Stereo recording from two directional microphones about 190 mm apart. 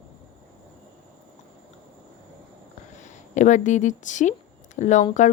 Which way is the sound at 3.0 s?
40° left (ahead or behind).